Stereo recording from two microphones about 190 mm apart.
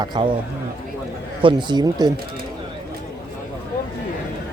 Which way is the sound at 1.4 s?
25° right (ahead or behind).